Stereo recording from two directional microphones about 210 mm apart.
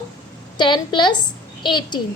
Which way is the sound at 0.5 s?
20° left (ahead or behind).